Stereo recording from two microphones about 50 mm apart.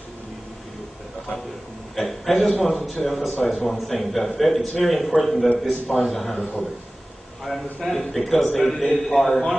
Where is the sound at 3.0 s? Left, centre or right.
Centre.